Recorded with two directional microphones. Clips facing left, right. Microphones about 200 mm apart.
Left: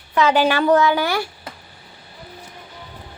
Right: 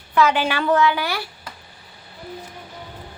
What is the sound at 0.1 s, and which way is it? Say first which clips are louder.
Speech: even; 30° left (ahead or behind).